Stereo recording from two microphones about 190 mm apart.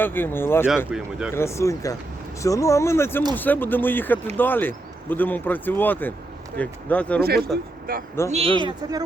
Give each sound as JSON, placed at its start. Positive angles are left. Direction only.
{"t": 0.0, "sound": "speech", "side_deg": 10}
{"t": 0.9, "sound": "speech", "side_deg": -5}
{"t": 1.3, "sound": "speech", "side_deg": 15}
{"t": 7.2, "sound": "a man's voice", "side_deg": -55}
{"t": 8.3, "sound": "speech", "side_deg": -30}